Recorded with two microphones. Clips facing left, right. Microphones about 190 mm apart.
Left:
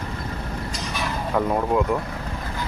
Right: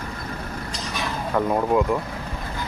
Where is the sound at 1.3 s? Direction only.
Centre (ahead or behind).